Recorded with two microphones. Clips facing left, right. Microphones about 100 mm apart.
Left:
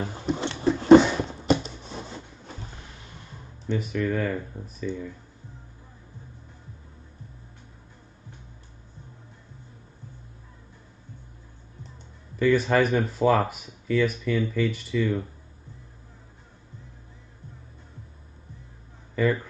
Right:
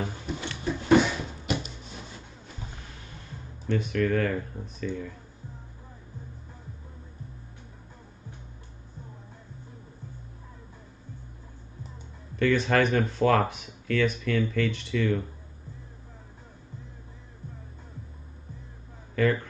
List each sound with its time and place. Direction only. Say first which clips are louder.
0.3 s a sound: left 10 dB; 25° left (ahead or behind)
3.6 s speech: right 1 dB; 10° left (ahead or behind)
12.4 s speech: left 2 dB; 5° left (ahead or behind)